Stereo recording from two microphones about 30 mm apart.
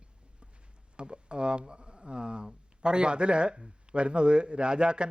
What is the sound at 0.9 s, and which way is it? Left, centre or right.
A man's voice, right.